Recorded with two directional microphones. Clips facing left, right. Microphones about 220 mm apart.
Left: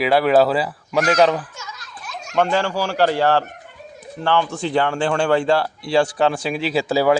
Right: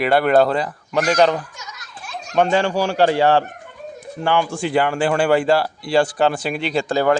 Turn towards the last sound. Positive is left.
turn(degrees=5)  # may be behind; listen again after turning